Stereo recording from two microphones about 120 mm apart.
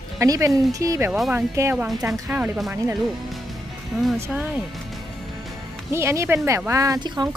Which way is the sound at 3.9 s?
Centre (ahead or behind).